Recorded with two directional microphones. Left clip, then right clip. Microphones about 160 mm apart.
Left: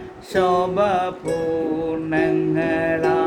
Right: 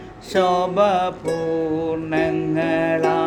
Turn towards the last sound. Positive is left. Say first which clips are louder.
# right 1 dB
turn(degrees=-40)  # may be behind; listen again after turning